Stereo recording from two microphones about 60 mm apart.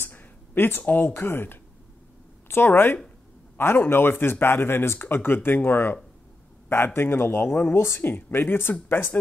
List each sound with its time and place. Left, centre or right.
0.0 s speech: left